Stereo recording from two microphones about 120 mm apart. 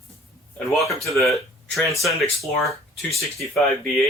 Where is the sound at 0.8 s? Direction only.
25° left (ahead or behind).